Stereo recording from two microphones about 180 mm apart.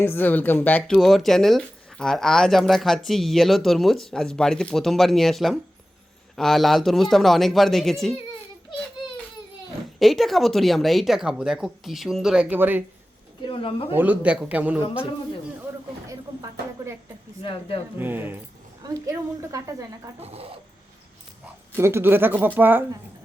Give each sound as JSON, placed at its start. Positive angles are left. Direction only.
{"t": 0.0, "sound": "speech", "side_deg": 10}
{"t": 10.0, "sound": "speech", "side_deg": 0}
{"t": 13.4, "sound": "speech", "side_deg": 30}
{"t": 13.9, "sound": "speech", "side_deg": -10}
{"t": 16.0, "sound": "music", "side_deg": -15}
{"t": 17.4, "sound": "speech", "side_deg": 30}
{"t": 17.9, "sound": "speech", "side_deg": -10}
{"t": 20.1, "sound": "speech", "side_deg": -35}
{"t": 21.8, "sound": "speech", "side_deg": -15}